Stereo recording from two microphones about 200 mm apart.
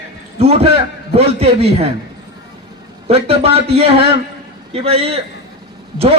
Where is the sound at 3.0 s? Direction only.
30° right (ahead or behind).